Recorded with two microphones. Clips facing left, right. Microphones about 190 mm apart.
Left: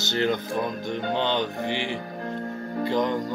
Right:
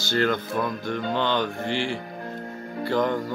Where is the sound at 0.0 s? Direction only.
20° left (ahead or behind).